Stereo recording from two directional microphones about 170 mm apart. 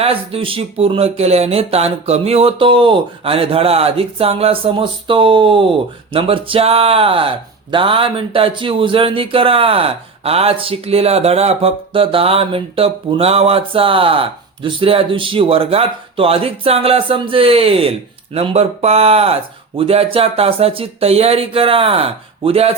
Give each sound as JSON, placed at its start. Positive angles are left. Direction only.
{"t": 0.0, "sound": "speech", "side_deg": -35}